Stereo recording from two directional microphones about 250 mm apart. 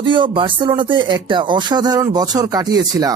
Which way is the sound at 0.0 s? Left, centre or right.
Centre.